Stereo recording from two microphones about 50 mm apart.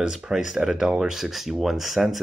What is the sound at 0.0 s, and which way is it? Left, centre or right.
Speech, centre.